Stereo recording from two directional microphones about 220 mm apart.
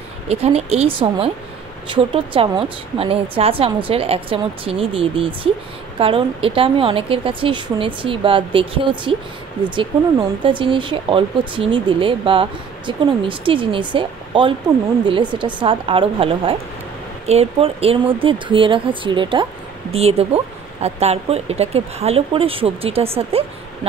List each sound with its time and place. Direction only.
0.3 s speech: 30° right (ahead or behind)